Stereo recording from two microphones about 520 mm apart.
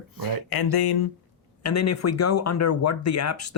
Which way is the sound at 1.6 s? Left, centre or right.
Left.